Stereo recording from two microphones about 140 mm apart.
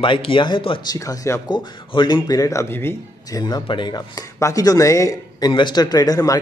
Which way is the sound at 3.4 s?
35° left (ahead or behind).